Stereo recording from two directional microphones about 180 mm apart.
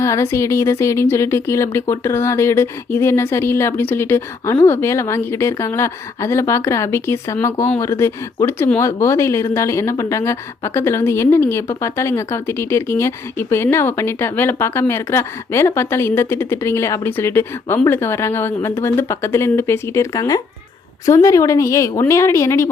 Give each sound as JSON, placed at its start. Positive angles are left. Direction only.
{"t": 0.0, "sound": "a woman's voice", "side_deg": 15}